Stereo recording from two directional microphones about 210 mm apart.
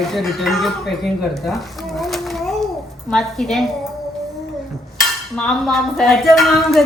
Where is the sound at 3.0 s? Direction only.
Centre (ahead or behind).